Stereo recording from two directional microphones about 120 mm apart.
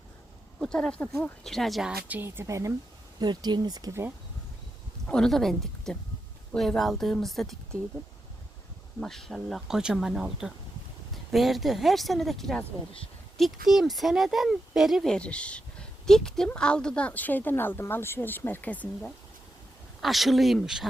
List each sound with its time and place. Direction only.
0.6 s a woman's voice: 5° left (ahead or behind); by 2.7 s 25° right (ahead or behind)
3.2 s speech: 35° right (ahead or behind)
5.0 s speech: 5° left (ahead or behind)
9.0 s a woman's voice: 5° left (ahead or behind)
20.0 s speech: centre (ahead or behind)